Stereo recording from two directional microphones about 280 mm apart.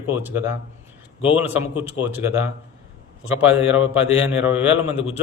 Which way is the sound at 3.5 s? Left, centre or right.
Centre.